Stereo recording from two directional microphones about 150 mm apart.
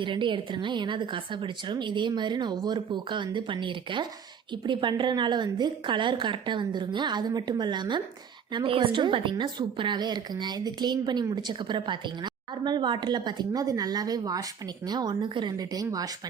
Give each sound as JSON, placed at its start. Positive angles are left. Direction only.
{"t": 0.0, "sound": "a woman's voice", "side_deg": -35}